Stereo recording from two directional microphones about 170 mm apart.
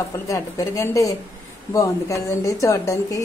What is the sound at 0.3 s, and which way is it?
A woman's voice, 20° left (ahead or behind).